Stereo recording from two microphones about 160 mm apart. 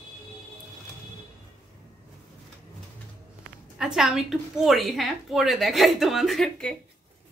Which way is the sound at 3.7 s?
5° right (ahead or behind).